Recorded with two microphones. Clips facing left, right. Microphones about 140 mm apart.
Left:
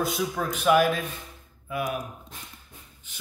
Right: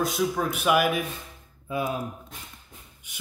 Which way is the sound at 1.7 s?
25° right (ahead or behind).